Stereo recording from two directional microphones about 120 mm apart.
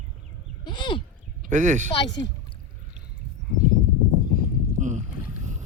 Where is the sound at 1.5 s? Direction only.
90° right.